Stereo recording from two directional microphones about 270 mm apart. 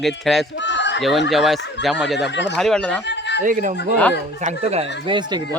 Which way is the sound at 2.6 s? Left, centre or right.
Centre.